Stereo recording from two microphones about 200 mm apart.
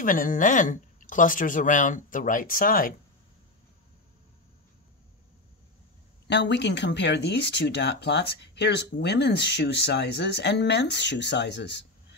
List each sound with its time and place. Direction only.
0.0 s speech: 45° left (ahead or behind)
6.2 s speech: 60° left (ahead or behind)